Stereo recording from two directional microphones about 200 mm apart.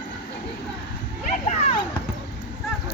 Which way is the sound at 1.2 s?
35° left (ahead or behind).